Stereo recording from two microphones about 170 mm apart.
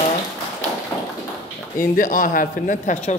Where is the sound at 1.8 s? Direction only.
50° left (ahead or behind).